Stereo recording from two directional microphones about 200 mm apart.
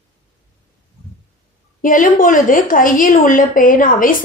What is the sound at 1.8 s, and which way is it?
A woman's voice, 45° left (ahead or behind).